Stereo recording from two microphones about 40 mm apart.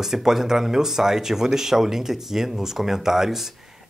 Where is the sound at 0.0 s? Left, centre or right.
Centre.